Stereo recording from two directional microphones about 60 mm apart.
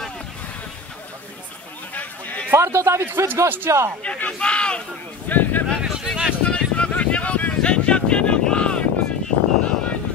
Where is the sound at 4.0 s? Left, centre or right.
Centre.